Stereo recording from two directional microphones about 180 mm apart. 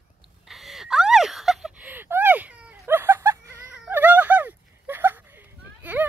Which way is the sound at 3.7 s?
10° right (ahead or behind).